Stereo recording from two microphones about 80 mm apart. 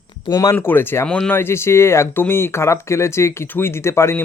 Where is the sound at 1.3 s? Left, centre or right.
Left.